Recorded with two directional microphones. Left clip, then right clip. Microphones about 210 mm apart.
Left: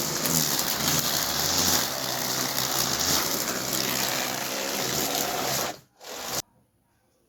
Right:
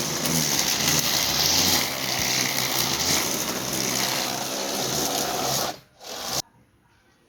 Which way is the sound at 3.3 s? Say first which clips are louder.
Right 1 dB; 15° right (ahead or behind).